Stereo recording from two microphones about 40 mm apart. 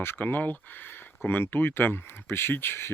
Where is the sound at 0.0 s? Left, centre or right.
Left.